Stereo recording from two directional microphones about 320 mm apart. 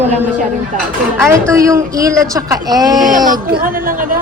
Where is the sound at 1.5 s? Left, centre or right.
Centre.